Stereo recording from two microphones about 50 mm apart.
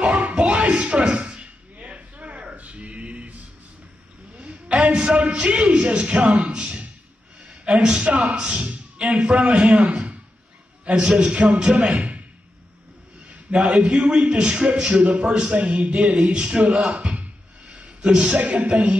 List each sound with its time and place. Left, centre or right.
0.0 s music: right
4.6 s a man's voice: centre
13.6 s a man's voice: right
16.9 s a sound: right
18.3 s a man's voice: right